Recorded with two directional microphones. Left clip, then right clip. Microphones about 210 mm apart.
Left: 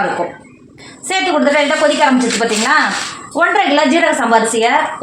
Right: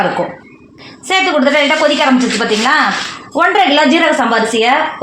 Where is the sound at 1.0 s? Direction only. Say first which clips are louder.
Right 2 dB; 45° right (ahead or behind).